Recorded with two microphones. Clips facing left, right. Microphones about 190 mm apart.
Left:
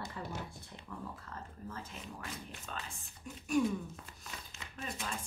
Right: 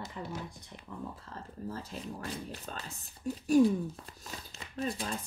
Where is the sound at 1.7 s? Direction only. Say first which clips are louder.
Right 7 dB; 35° right (ahead or behind).